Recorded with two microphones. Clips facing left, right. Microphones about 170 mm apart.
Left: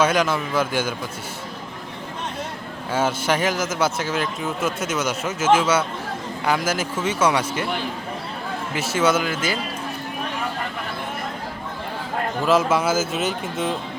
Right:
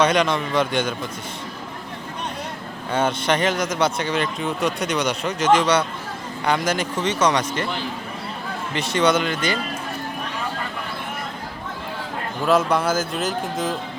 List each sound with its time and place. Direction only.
0.0 s speech: 5° left (ahead or behind)
2.9 s speech: 5° left (ahead or behind)
8.7 s speech: 5° left (ahead or behind)
12.5 s speech: centre (ahead or behind)